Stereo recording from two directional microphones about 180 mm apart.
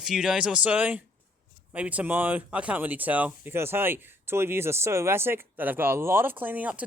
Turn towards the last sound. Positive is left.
turn(degrees=-10)  # may be behind; listen again after turning